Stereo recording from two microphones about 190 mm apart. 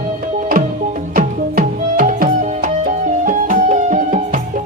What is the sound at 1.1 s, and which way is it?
Music, 45° right (ahead or behind).